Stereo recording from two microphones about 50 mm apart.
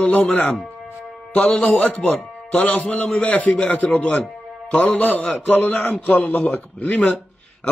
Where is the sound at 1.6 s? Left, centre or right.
Left.